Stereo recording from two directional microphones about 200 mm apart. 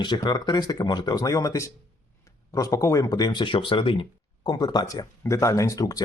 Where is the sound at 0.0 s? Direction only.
20° left (ahead or behind).